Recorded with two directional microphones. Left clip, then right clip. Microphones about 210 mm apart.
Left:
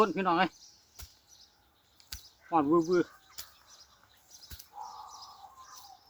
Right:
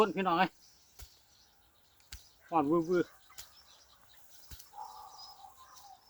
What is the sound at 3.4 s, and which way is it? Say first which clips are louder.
Chicken: left 5 dB; 20° left (ahead or behind).